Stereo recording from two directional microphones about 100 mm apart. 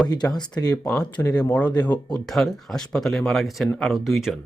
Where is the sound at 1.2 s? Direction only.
20° left (ahead or behind).